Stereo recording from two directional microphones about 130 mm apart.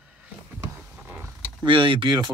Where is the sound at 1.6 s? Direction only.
40° right (ahead or behind).